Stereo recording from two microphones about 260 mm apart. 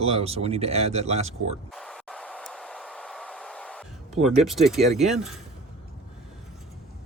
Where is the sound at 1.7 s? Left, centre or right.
Centre.